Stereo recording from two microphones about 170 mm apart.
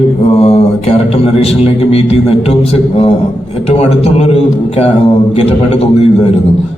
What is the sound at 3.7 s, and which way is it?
A man's voice, 35° left (ahead or behind).